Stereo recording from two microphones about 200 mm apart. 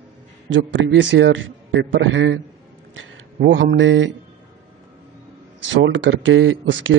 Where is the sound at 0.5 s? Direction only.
65° right (ahead or behind).